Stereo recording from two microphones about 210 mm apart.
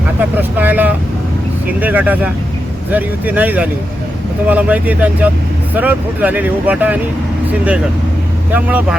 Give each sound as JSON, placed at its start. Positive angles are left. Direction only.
{"t": 0.2, "sound": "speech", "side_deg": -10}